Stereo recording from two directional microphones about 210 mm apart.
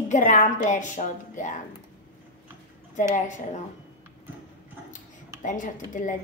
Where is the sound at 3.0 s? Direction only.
35° left (ahead or behind).